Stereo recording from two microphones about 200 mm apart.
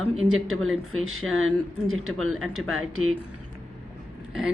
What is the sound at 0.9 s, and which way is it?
Speech, 90° right.